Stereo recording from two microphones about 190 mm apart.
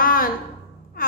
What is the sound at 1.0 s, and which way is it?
Music, 50° left (ahead or behind).